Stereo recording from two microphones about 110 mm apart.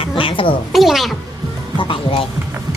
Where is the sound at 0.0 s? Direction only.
55° left (ahead or behind).